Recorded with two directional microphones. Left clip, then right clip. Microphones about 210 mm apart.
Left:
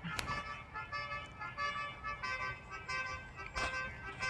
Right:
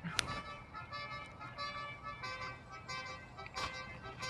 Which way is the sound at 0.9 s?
40° right (ahead or behind).